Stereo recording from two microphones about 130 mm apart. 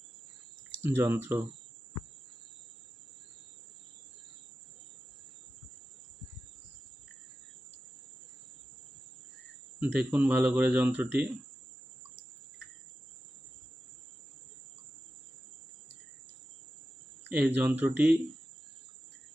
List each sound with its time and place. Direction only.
0.8 s speech: 20° right (ahead or behind)
9.8 s speech: 10° right (ahead or behind)
17.2 s speech: 15° right (ahead or behind)